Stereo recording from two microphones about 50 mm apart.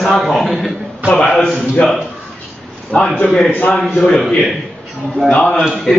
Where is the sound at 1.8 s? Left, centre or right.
Left.